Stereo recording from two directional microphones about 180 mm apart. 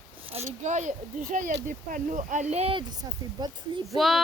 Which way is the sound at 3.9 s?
Centre (ahead or behind).